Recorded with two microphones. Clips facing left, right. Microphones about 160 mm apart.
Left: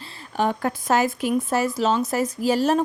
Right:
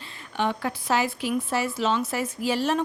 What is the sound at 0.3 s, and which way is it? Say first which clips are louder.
Speech: left 4 dB; 45° left (ahead or behind).